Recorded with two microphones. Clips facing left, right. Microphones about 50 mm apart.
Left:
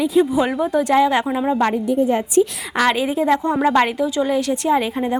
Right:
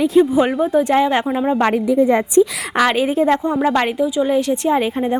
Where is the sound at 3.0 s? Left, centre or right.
Right.